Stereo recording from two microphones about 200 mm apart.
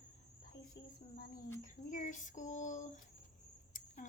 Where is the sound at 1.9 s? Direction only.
40° left (ahead or behind).